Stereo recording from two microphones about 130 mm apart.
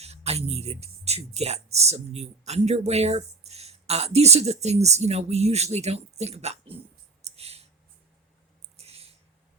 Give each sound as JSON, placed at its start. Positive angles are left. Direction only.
{"t": 0.0, "sound": "speech", "side_deg": -55}
{"t": 7.2, "sound": "clicking", "side_deg": -55}
{"t": 8.8, "sound": "a sound", "side_deg": -50}